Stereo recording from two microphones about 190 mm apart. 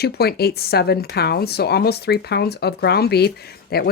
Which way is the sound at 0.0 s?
55° left (ahead or behind).